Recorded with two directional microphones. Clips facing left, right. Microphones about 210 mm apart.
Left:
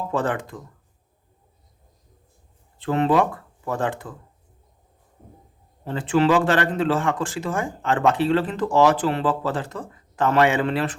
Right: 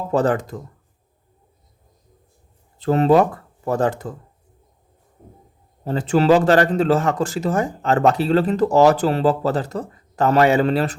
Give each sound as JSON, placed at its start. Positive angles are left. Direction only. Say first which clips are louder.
{"t": 0.1, "sound": "speech", "louder": "right 8 dB", "side_deg": -40}
{"t": 2.7, "sound": "speech", "louder": "right 5 dB", "side_deg": -40}
{"t": 5.8, "sound": "speech", "louder": "right 2 dB", "side_deg": -40}